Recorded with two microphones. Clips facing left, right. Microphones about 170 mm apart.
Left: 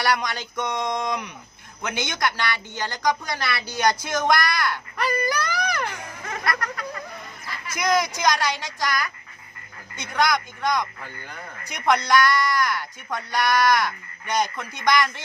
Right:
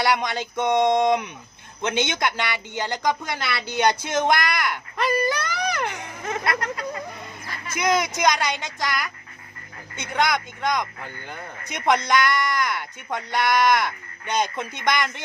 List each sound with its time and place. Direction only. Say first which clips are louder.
0.0 s speech: right 2 dB; 20° right (ahead or behind)